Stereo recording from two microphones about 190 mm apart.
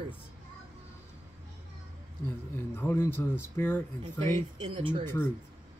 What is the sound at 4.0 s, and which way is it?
Speech, 40° right (ahead or behind).